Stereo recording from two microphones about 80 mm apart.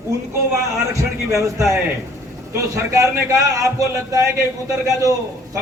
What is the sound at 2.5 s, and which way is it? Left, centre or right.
A man's voice, right.